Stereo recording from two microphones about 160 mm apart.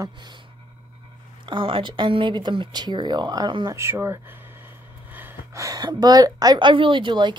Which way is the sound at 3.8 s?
15° right (ahead or behind).